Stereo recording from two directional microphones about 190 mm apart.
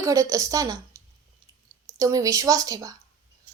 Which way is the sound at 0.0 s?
15° right (ahead or behind).